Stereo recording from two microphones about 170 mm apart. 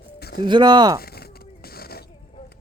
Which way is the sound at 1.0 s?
65° left (ahead or behind).